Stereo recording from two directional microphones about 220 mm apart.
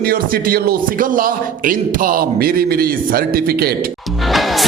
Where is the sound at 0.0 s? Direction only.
40° right (ahead or behind).